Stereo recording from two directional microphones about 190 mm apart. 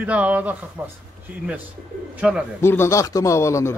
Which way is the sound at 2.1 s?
5° right (ahead or behind).